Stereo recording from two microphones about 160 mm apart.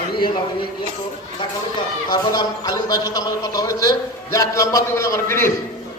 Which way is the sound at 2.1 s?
20° left (ahead or behind).